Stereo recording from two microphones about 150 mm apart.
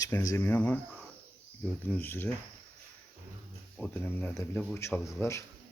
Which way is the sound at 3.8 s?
15° left (ahead or behind).